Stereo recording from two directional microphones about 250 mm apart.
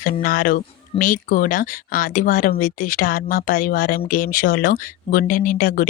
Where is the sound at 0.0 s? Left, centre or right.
Left.